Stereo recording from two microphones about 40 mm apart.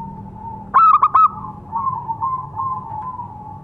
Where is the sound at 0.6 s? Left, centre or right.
Centre.